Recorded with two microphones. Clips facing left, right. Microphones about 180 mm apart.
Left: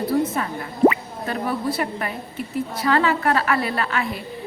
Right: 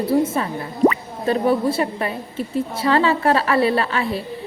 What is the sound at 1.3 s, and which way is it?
A woman's voice, 25° right (ahead or behind).